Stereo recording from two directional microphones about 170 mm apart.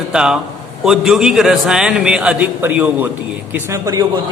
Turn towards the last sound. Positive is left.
turn(degrees=-20)  # may be behind; listen again after turning